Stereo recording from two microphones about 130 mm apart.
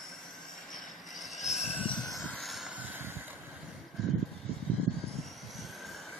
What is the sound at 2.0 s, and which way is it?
Vehicle, centre (ahead or behind).